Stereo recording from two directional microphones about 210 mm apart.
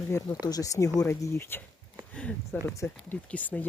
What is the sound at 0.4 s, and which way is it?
Speech, 15° left (ahead or behind).